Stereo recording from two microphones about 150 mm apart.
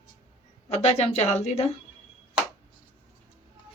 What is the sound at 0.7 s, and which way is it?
Speech, 45° left (ahead or behind).